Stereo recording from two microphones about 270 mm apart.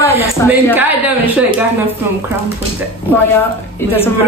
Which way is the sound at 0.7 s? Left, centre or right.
Centre.